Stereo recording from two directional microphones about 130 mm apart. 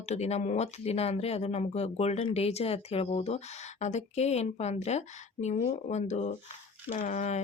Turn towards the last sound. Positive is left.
turn(degrees=65)  # may be behind; listen again after turning